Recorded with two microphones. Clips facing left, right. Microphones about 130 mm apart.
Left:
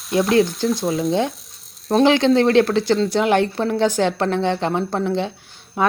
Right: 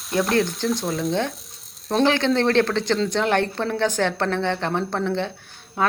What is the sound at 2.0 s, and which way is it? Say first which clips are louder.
Speech: left 4 dB; 20° left (ahead or behind).